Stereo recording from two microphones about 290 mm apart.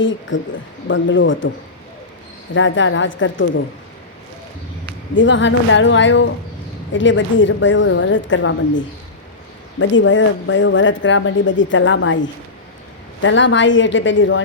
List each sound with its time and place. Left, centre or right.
0.0 s speech: left
2.6 s speech: left
5.1 s speech: left